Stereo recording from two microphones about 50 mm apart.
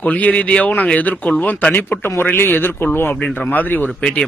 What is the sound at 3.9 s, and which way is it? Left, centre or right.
Speech, left.